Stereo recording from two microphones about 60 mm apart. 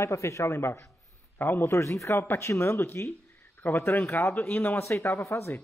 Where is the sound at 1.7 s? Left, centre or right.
Left.